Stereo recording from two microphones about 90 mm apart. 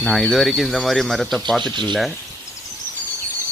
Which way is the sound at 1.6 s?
60° right (ahead or behind).